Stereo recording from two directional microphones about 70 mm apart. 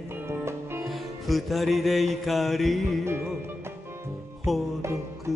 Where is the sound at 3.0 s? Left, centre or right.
Right.